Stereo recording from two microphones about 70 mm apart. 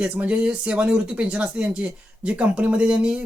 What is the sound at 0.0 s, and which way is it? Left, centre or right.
Speech, centre.